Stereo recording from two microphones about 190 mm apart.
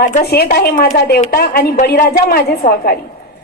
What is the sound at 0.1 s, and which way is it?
A woman's voice, 50° left (ahead or behind).